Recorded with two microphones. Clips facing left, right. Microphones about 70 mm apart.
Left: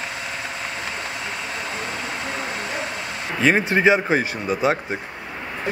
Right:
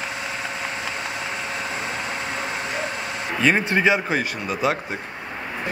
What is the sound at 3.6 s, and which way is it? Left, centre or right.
Speech, left.